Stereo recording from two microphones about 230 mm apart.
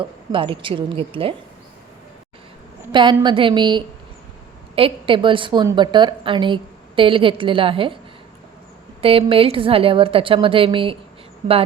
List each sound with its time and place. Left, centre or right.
0.0 s a woman's voice: right
2.9 s a woman's voice: centre
9.0 s a woman's voice: right